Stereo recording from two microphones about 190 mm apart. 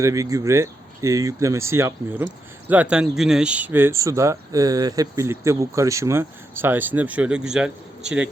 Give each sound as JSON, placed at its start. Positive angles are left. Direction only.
{"t": 0.0, "sound": "speech", "side_deg": -15}